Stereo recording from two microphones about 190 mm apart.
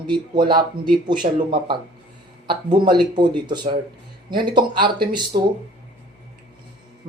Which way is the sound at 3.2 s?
25° right (ahead or behind).